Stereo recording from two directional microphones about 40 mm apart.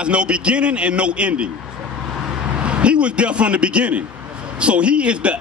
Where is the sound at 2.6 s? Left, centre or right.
Right.